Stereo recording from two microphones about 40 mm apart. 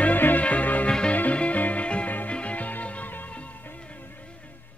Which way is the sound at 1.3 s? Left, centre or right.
Left.